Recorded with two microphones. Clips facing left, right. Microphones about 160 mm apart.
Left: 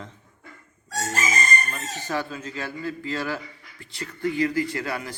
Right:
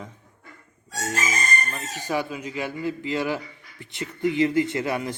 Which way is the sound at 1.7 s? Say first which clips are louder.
Right 2 dB; 15° right (ahead or behind).